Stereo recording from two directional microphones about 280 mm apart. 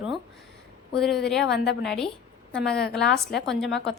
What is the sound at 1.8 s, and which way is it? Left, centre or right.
A woman's voice, centre.